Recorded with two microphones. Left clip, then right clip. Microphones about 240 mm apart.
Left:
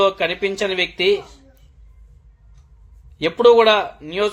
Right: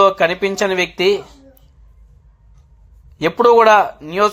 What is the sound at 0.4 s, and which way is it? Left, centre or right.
Speech, centre.